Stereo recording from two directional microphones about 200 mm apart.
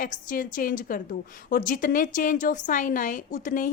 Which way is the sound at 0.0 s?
45° left (ahead or behind).